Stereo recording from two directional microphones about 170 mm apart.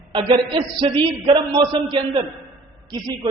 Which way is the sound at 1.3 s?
30° right (ahead or behind).